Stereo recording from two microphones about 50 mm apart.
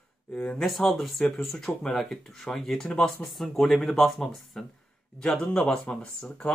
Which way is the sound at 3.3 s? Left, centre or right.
Centre.